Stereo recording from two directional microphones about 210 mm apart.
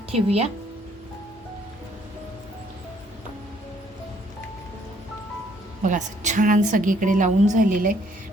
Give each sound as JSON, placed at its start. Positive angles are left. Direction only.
{"t": 0.1, "sound": "speech", "side_deg": -30}
{"t": 5.8, "sound": "a woman's voice", "side_deg": -35}